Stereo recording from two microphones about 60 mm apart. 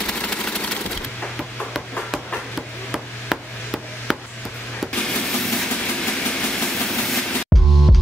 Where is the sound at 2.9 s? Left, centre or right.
Centre.